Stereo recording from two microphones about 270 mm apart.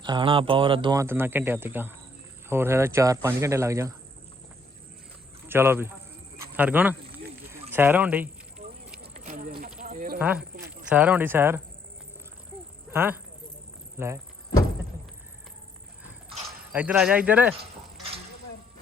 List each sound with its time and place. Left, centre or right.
0.0 s speech: centre
5.5 s a man's voice: centre
8.6 s vehicle: right
9.1 s a sound: right
10.2 s speech: centre
12.9 s speech: centre
16.7 s speech: centre